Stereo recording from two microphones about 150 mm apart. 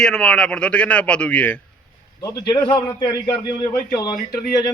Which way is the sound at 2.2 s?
25° left (ahead or behind).